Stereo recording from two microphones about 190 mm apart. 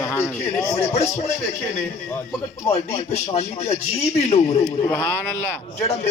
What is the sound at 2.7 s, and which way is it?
A man's voice, 30° left (ahead or behind).